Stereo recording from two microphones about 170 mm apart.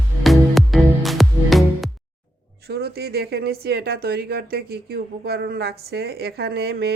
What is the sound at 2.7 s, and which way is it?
Speech, 70° right (ahead or behind).